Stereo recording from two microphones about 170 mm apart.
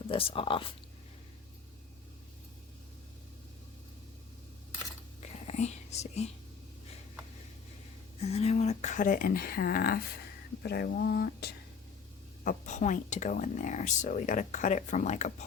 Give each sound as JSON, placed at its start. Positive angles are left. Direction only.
{"t": 0.1, "sound": "speech", "side_deg": 35}
{"t": 5.5, "sound": "whispering", "side_deg": 40}
{"t": 8.2, "sound": "speech", "side_deg": 40}
{"t": 12.5, "sound": "speech", "side_deg": 45}